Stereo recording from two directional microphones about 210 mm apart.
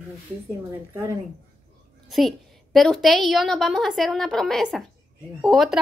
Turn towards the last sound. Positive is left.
turn(degrees=0)  # may be behind; listen again after turning